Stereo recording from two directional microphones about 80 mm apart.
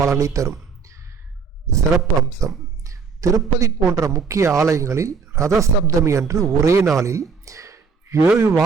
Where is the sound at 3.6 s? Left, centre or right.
Right.